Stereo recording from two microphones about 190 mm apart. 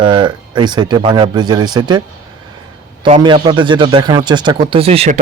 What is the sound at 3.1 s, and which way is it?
Speech, 25° right (ahead or behind).